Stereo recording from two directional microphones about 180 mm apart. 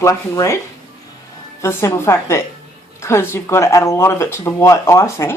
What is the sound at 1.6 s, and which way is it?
Speech, 15° left (ahead or behind).